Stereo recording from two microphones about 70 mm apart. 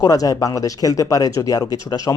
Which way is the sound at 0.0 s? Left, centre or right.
Left.